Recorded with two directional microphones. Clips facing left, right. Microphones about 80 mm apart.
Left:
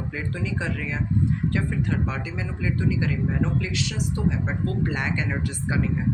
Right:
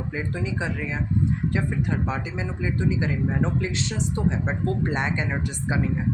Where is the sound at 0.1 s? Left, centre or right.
Centre.